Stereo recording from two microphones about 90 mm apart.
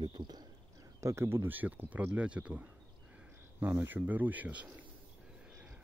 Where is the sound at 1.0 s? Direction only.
30° right (ahead or behind).